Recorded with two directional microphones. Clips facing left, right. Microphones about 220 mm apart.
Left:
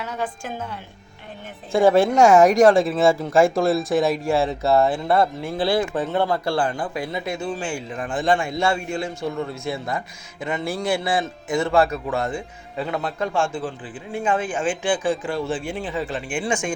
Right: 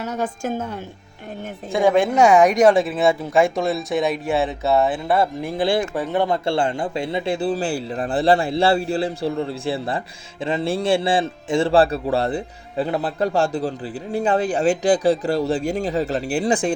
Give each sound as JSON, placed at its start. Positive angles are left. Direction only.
{"t": 0.0, "sound": "a woman's voice", "side_deg": -45}
{"t": 1.7, "sound": "speech", "side_deg": 5}
{"t": 5.4, "sound": "speech", "side_deg": -15}